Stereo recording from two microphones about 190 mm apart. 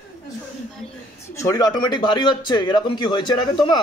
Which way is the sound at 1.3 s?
15° left (ahead or behind).